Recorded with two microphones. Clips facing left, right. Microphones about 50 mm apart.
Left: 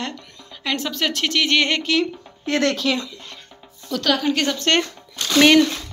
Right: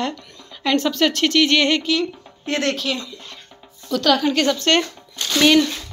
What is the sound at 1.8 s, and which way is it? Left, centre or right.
Speech, left.